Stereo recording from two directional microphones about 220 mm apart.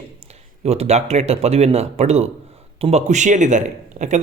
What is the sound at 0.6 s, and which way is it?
A man's voice, 30° right (ahead or behind).